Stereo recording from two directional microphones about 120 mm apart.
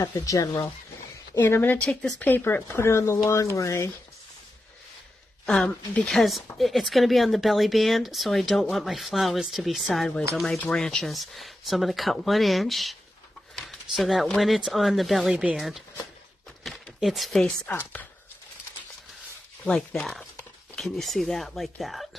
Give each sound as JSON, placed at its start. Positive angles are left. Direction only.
{"t": 0.0, "sound": "speech", "side_deg": 30}
{"t": 1.4, "sound": "speech", "side_deg": 15}
{"t": 5.5, "sound": "speech", "side_deg": 5}
{"t": 16.6, "sound": "a sound", "side_deg": 0}
{"t": 17.6, "sound": "speech", "side_deg": 15}
{"t": 19.6, "sound": "speech", "side_deg": 5}